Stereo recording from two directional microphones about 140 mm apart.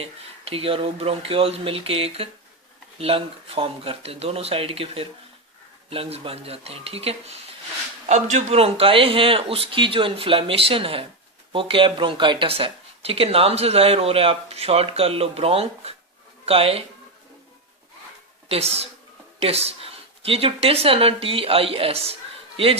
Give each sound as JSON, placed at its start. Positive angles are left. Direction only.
{"t": 0.0, "sound": "a man's voice", "side_deg": -45}
{"t": 18.4, "sound": "speech", "side_deg": -45}